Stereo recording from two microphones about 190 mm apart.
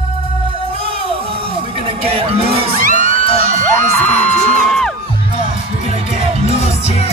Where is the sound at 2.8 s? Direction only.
45° right (ahead or behind).